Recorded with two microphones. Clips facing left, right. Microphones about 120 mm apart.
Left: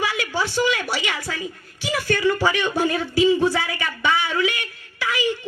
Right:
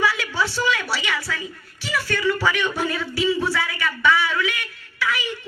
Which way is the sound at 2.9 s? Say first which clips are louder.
Left 5 dB; 45° left (ahead or behind).